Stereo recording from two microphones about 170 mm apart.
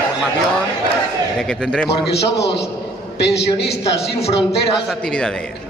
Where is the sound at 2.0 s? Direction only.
80° left.